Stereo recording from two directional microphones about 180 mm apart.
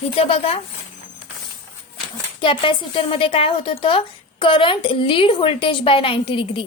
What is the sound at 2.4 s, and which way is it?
A woman's voice, 30° left (ahead or behind).